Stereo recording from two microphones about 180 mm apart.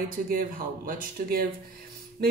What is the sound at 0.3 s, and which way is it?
Speech, 50° right (ahead or behind).